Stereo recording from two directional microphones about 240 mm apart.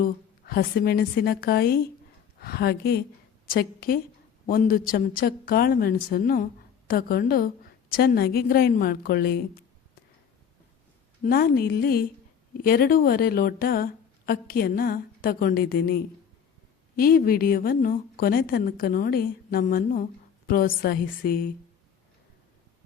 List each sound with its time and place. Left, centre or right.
0.0 s a woman's voice: left
11.2 s a woman's voice: left